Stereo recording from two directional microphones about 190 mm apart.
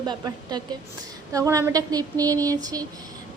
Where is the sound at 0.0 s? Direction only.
20° right (ahead or behind).